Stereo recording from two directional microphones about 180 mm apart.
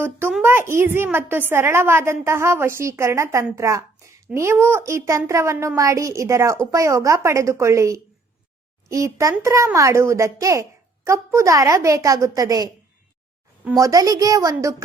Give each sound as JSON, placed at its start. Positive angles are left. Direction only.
{"t": 0.0, "sound": "a woman's voice", "side_deg": -10}
{"t": 13.7, "sound": "a woman's voice", "side_deg": -20}